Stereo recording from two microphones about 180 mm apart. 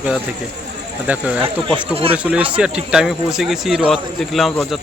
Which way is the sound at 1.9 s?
30° right (ahead or behind).